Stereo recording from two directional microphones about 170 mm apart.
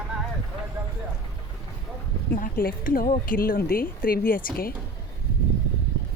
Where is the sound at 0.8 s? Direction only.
15° right (ahead or behind).